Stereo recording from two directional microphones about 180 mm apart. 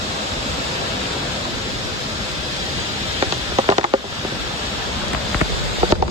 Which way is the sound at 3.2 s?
30° right (ahead or behind).